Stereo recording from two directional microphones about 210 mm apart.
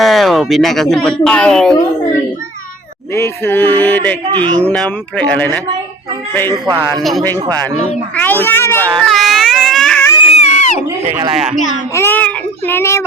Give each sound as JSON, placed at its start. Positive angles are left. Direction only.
{"t": 0.0, "sound": "speech", "side_deg": 0}
{"t": 3.1, "sound": "speech", "side_deg": 10}
{"t": 6.5, "sound": "a man's voice", "side_deg": -15}
{"t": 7.0, "sound": "speech", "side_deg": 0}
{"t": 8.1, "sound": "a sound", "side_deg": 10}
{"t": 10.2, "sound": "baby cry", "side_deg": 30}
{"t": 11.9, "sound": "a child's voice", "side_deg": 10}